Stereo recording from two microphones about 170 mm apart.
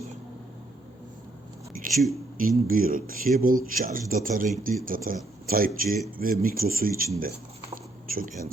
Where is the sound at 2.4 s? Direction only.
55° right (ahead or behind).